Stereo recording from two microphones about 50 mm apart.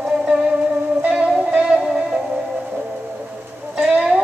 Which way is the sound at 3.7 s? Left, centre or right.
Right.